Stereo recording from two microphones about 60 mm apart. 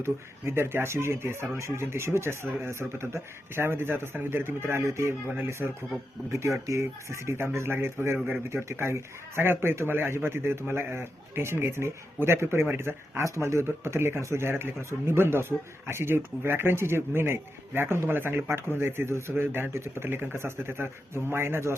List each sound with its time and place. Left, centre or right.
0.0 s speech: right
6.3 s speech: right
13.2 s speech: right